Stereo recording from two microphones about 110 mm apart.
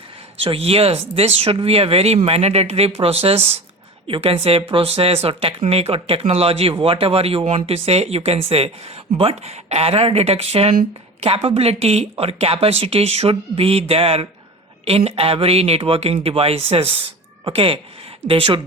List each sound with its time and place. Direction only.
0.4 s speech: 60° right (ahead or behind)